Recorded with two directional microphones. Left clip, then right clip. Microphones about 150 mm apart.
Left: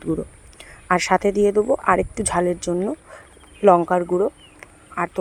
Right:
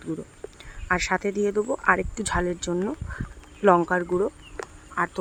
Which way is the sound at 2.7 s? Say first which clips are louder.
Left 4 dB; 5° left (ahead or behind).